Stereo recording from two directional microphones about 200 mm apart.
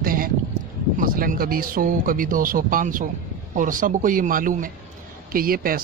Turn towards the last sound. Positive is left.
turn(degrees=-45)  # may be behind; listen again after turning